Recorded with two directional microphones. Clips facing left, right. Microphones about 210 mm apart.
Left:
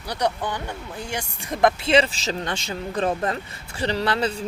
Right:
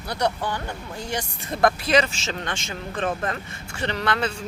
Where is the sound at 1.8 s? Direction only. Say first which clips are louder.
Left 2 dB; 30° left (ahead or behind).